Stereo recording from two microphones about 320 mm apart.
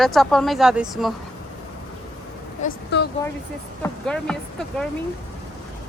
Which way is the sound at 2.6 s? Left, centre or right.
Left.